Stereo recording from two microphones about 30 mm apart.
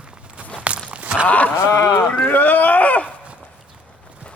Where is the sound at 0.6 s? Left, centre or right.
Right.